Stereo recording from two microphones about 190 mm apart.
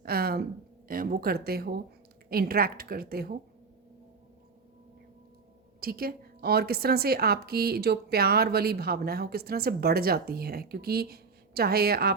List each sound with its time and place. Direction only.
0.0 s a sound: 55° right (ahead or behind)
0.9 s a woman's voice: 50° right (ahead or behind)
5.8 s a woman's voice: 55° right (ahead or behind)